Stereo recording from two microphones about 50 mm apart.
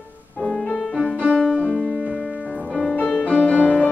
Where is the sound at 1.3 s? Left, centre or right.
Left.